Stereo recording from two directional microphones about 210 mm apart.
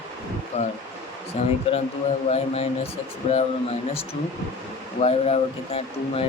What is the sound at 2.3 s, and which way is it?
Speech, 30° left (ahead or behind).